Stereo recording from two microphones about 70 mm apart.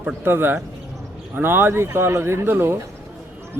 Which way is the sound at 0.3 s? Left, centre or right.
Right.